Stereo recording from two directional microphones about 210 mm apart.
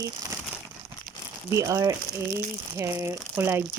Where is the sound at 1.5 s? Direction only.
15° right (ahead or behind).